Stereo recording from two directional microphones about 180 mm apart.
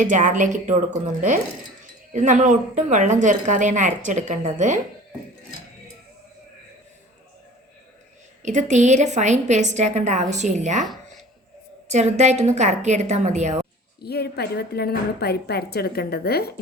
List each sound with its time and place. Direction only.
0.0 s speech: 45° right (ahead or behind)
8.4 s a woman's voice: 40° right (ahead or behind)
11.9 s a woman's voice: 40° right (ahead or behind)
14.0 s a woman's voice: 65° left (ahead or behind)